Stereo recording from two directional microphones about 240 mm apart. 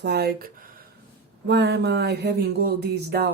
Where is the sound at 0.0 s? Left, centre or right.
Right.